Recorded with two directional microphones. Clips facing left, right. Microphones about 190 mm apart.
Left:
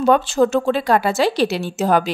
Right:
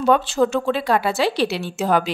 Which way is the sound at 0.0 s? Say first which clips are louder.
Left 2 dB; 45° left (ahead or behind).